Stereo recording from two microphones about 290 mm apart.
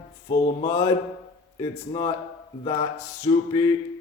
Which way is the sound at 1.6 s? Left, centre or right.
Centre.